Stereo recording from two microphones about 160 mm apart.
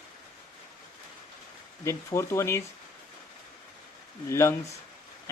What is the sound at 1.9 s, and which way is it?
Speech, 15° left (ahead or behind).